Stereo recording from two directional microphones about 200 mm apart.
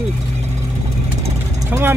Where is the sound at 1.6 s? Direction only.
10° right (ahead or behind).